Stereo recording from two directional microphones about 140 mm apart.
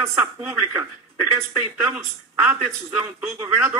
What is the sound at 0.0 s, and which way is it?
Speech, 15° right (ahead or behind).